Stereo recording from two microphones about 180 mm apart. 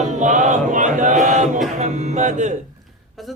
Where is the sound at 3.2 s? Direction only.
Centre (ahead or behind).